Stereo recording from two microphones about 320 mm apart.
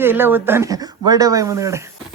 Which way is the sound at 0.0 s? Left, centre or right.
Centre.